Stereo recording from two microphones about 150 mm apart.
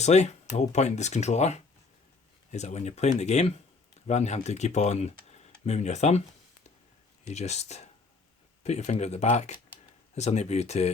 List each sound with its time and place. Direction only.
0.0 s speech: 50° left (ahead or behind)
7.3 s speech: 50° left (ahead or behind)